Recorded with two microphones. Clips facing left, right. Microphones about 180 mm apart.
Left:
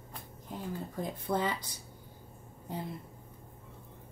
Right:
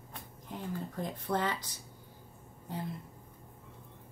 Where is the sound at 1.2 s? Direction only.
10° left (ahead or behind).